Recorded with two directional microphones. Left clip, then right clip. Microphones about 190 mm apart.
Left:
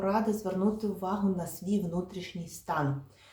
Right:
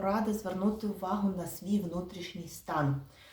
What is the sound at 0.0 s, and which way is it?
Speech, 20° left (ahead or behind).